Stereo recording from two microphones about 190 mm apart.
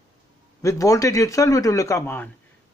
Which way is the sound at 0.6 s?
15° left (ahead or behind).